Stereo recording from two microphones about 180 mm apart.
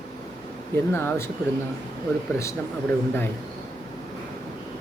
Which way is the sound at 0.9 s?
15° left (ahead or behind).